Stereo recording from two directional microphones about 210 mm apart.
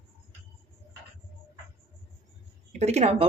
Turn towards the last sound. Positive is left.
turn(degrees=-30)  # may be behind; listen again after turning